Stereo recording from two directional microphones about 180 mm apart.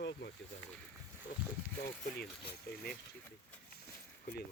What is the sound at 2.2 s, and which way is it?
Speech, 60° left (ahead or behind).